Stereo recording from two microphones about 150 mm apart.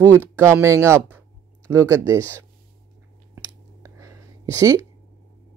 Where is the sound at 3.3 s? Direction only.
20° right (ahead or behind).